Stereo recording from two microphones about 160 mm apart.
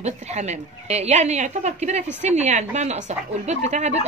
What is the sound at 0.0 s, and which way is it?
Speech, 45° right (ahead or behind).